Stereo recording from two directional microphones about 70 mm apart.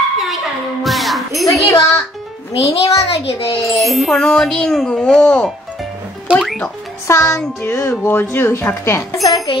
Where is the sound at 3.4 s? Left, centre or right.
Left.